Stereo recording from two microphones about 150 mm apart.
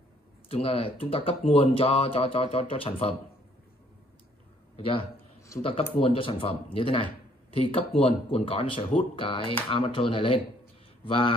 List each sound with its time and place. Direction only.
0.5 s speech: 40° left (ahead or behind)
4.7 s a man's voice: 35° left (ahead or behind)